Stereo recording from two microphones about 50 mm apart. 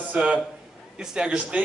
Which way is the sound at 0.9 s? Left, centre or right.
Centre.